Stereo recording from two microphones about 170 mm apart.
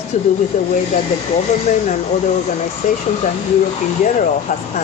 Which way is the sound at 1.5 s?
40° left (ahead or behind).